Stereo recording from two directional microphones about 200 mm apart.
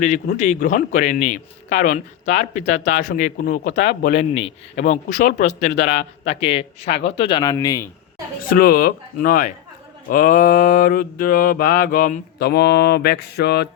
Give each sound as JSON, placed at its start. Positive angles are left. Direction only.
{"t": 0.0, "sound": "a man's voice", "side_deg": 35}
{"t": 8.4, "sound": "mantra", "side_deg": 50}